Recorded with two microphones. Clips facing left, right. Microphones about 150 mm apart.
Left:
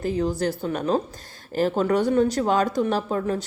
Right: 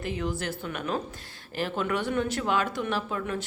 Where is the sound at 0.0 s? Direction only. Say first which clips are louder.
Left 7 dB; 35° left (ahead or behind).